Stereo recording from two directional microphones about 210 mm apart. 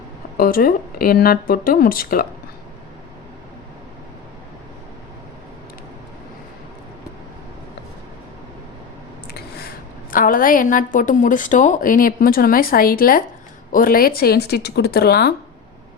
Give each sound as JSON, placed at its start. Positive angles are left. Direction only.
{"t": 0.3, "sound": "speech", "side_deg": 45}
{"t": 9.3, "sound": "a woman's voice", "side_deg": 45}